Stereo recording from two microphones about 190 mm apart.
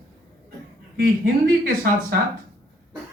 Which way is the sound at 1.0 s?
55° right (ahead or behind).